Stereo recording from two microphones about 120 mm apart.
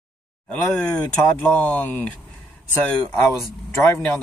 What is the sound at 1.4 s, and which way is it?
Speech, 10° left (ahead or behind).